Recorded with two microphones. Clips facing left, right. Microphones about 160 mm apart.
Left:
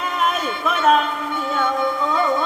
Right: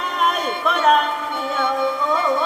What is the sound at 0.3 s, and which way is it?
Speech, centre (ahead or behind).